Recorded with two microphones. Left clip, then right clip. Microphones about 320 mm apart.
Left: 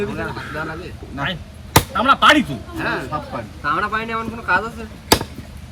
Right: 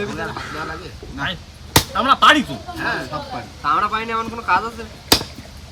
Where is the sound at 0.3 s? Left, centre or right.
Centre.